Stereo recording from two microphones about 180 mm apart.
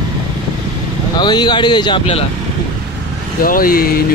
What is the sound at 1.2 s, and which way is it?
Speech, 25° left (ahead or behind).